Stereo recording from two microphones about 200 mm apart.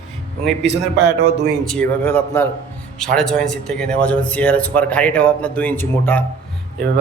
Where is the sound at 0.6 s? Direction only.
60° right (ahead or behind).